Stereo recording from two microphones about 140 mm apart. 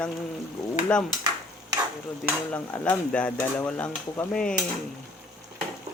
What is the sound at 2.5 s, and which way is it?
Mechanisms, 10° left (ahead or behind).